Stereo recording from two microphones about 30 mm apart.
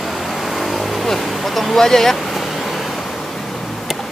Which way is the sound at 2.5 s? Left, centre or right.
Centre.